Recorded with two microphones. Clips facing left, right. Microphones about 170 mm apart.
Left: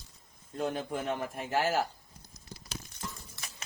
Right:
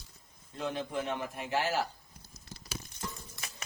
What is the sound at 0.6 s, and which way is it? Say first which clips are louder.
A man's voice: left 2 dB; 45° left (ahead or behind).